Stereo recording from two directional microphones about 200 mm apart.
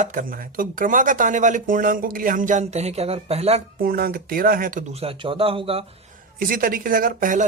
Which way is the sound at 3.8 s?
45° right (ahead or behind).